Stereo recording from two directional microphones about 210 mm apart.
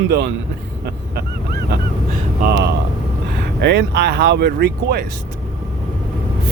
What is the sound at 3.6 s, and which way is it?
Speech, 55° right (ahead or behind).